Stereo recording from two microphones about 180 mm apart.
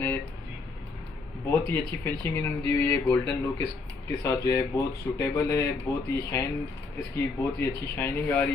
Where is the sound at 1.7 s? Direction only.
10° left (ahead or behind).